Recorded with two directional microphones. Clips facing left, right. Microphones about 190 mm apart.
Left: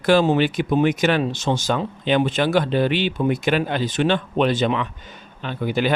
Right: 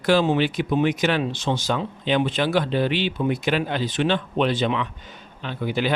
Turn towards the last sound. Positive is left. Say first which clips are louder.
# left 3 dB
turn(degrees=50)  # may be behind; listen again after turning